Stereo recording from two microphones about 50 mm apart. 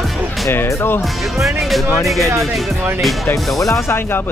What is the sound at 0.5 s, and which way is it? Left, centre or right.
Speech, left.